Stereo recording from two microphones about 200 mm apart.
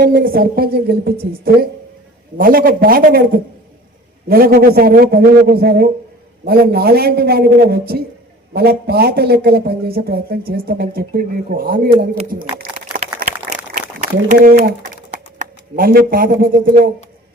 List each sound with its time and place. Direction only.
0.0 s speech: 50° right (ahead or behind)
1.1 s a woman's voice: 30° right (ahead or behind)
2.4 s speech: 45° right (ahead or behind)
14.0 s speech: 45° right (ahead or behind)